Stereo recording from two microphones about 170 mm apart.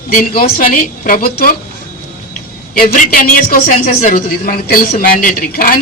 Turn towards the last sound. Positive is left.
turn(degrees=55)  # may be behind; listen again after turning